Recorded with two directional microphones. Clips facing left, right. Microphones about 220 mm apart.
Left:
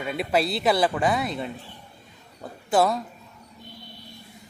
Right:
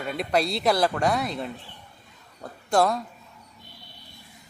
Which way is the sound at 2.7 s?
5° left (ahead or behind).